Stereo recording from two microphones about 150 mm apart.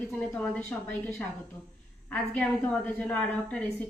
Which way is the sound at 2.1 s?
10° left (ahead or behind).